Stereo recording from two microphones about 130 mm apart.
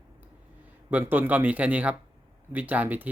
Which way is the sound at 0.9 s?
15° right (ahead or behind).